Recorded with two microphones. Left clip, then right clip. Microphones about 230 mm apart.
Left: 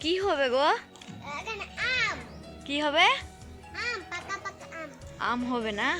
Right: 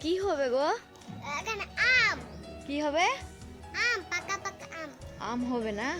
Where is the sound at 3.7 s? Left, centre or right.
Right.